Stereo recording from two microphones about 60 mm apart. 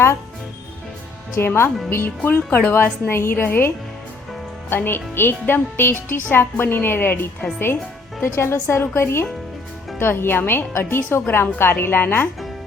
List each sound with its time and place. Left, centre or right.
1.4 s a woman's voice: left
4.9 s a woman's voice: left
8.2 s a woman's voice: left